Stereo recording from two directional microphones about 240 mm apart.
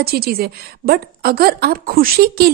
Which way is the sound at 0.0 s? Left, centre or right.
Right.